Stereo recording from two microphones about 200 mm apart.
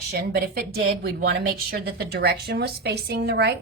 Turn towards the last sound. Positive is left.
turn(degrees=-55)  # may be behind; listen again after turning